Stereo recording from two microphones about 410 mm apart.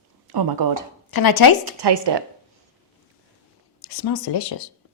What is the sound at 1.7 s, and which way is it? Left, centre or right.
Speech, right.